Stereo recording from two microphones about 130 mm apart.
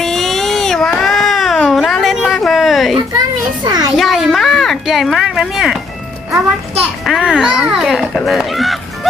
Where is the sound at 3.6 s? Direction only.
30° right (ahead or behind).